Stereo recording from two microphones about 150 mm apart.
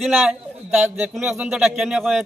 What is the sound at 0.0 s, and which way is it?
Speech, centre (ahead or behind).